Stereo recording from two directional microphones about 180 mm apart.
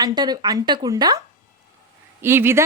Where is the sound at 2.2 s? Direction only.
15° right (ahead or behind).